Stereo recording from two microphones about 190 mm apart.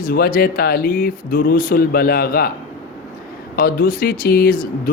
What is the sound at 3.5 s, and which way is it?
Speech, 50° left (ahead or behind).